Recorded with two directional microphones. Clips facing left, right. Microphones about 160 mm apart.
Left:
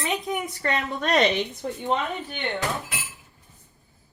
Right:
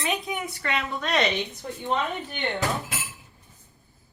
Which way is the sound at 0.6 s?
40° left (ahead or behind).